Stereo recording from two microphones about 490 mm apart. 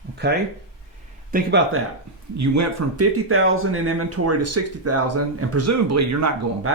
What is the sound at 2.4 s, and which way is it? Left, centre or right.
Speech, right.